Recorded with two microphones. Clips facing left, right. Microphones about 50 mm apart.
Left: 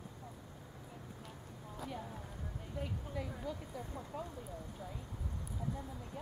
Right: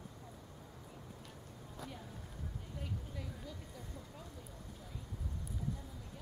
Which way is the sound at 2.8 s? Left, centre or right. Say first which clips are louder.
Left 6 dB; centre.